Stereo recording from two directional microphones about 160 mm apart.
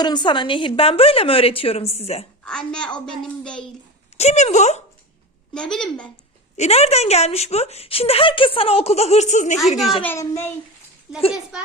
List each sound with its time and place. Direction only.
0.0 s speech: 30° left (ahead or behind)
2.4 s a woman's voice: 5° left (ahead or behind)
4.2 s speech: 40° left (ahead or behind)
5.5 s a woman's voice: 5° left (ahead or behind)
6.6 s speech: 40° left (ahead or behind)
9.6 s a woman's voice: centre (ahead or behind)
10.0 s a child's voice: 15° left (ahead or behind)
11.5 s a child's voice: 5° right (ahead or behind)